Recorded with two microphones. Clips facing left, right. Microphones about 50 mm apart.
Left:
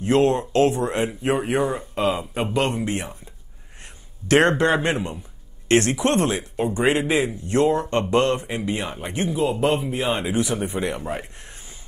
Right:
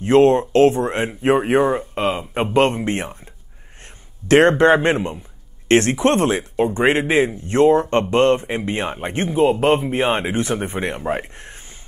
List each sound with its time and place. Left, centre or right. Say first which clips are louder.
0.0 s a man's voice: right 5 dB; right
4.3 s a man's voice: right 5 dB; right